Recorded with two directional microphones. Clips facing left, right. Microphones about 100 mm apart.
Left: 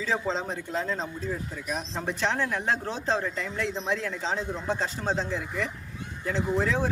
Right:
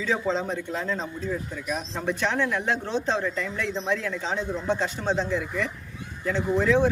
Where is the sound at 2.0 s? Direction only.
30° left (ahead or behind).